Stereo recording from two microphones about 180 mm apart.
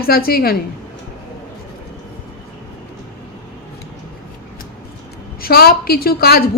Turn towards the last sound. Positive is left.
turn(degrees=60)  # may be behind; listen again after turning